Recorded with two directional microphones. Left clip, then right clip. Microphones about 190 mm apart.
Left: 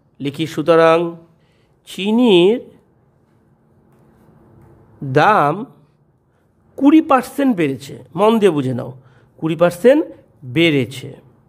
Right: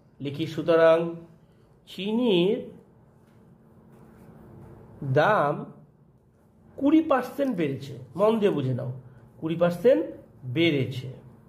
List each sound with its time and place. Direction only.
0.2 s a man's voice: 50° left (ahead or behind)
5.1 s a man's voice: 50° left (ahead or behind)
6.7 s a man's voice: 55° left (ahead or behind)